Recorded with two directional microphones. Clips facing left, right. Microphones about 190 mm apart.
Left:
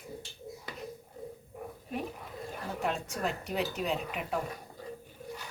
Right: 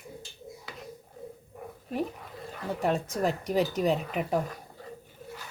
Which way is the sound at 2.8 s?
40° right (ahead or behind).